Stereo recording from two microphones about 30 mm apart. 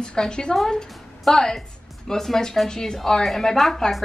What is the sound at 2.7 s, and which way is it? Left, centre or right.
Speech, left.